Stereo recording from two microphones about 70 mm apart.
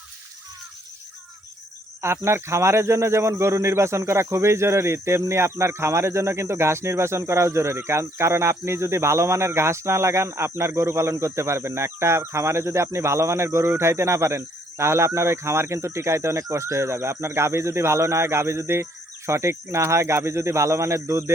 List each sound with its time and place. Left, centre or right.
2.0 s speech: right